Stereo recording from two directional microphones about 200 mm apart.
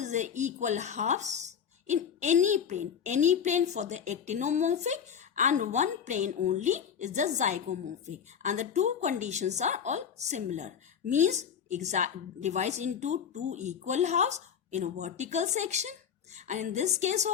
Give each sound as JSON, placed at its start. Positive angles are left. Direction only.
{"t": 0.0, "sound": "speech", "side_deg": -35}